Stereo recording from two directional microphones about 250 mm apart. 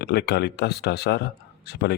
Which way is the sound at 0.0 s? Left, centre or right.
Left.